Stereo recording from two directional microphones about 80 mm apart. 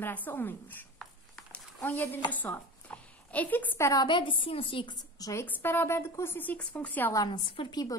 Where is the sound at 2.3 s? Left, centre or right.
Left.